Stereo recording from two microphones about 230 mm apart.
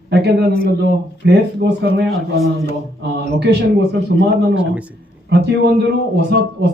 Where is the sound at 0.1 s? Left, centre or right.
Right.